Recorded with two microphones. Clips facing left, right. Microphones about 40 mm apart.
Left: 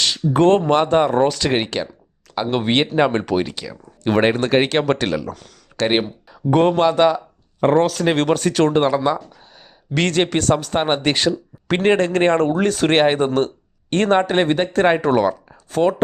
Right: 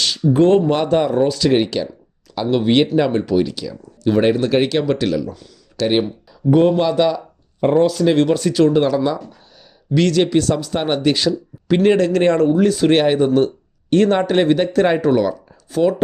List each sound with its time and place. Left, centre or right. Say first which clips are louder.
0.0 s a sound: even; left
0.3 s speech: even; left
5.8 s speech: right 1 dB; left